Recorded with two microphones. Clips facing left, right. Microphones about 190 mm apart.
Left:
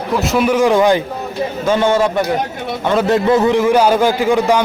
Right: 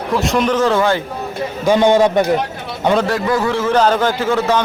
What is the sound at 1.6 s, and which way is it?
Speech, 15° right (ahead or behind).